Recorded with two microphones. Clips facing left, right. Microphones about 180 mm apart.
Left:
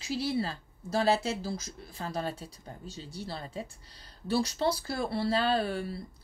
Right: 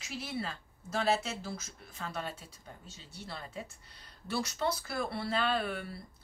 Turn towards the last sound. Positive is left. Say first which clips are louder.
# left 4 dB
turn(degrees=35)  # may be behind; listen again after turning